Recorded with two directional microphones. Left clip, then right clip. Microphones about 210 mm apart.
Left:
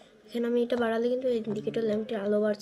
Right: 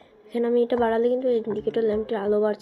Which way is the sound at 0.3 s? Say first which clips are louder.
Right 6 dB; 10° left (ahead or behind).